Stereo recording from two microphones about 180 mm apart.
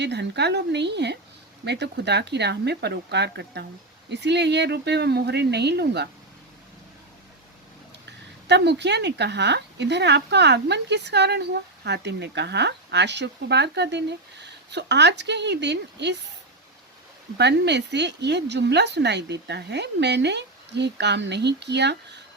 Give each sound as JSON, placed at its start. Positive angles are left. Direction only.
{"t": 0.0, "sound": "a woman's voice", "side_deg": -70}
{"t": 8.4, "sound": "a woman's voice", "side_deg": -75}
{"t": 17.3, "sound": "a woman's voice", "side_deg": -70}